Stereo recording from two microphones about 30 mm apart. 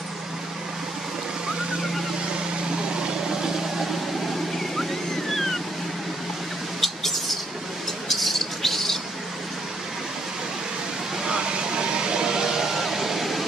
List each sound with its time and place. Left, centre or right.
6.8 s bird: centre
11.2 s a sound: right
12.7 s vehicle: centre